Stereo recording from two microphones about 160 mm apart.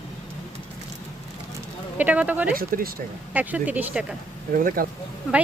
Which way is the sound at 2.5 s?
65° right (ahead or behind).